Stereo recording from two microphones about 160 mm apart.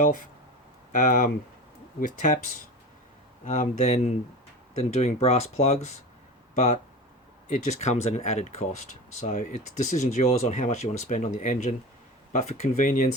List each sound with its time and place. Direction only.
1.0 s speech: 50° left (ahead or behind)
3.4 s speech: 45° left (ahead or behind)
7.4 s speech: 45° left (ahead or behind)